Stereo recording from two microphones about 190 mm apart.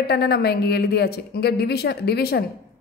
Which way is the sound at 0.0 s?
60° left (ahead or behind).